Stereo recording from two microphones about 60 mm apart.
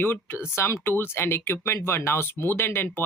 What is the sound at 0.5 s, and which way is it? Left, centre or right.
Speech, left.